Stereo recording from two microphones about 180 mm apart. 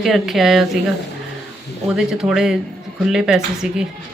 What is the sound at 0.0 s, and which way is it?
Speech, centre (ahead or behind).